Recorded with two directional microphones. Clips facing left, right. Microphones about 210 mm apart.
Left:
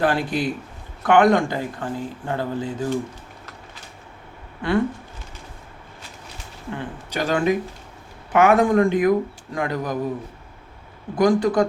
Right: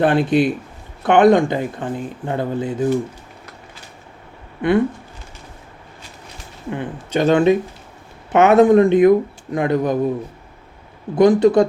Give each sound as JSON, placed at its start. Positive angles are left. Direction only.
{"t": 0.0, "sound": "speech", "side_deg": -20}
{"t": 6.7, "sound": "speech", "side_deg": -25}
{"t": 11.1, "sound": "speech", "side_deg": -25}